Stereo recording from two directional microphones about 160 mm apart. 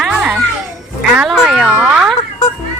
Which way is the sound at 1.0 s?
5° right (ahead or behind).